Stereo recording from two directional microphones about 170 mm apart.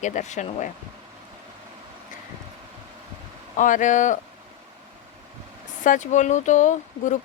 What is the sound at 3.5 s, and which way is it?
Speech, 50° left (ahead or behind).